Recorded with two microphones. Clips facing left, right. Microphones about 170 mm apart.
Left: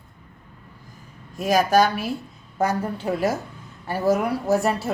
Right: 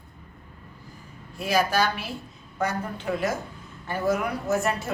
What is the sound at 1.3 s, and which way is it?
A woman's voice, 45° left (ahead or behind).